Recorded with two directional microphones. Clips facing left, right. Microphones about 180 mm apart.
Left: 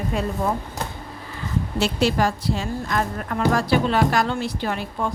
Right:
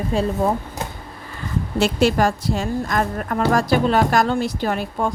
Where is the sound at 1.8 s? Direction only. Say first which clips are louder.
Right 4 dB; 50° right (ahead or behind).